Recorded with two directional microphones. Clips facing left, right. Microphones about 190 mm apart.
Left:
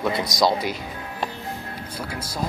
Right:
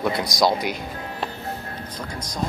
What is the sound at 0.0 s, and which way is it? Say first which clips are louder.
Speech: even; centre (ahead or behind).